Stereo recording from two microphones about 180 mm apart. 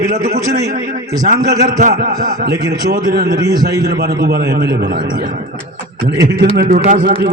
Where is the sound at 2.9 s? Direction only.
70° right (ahead or behind).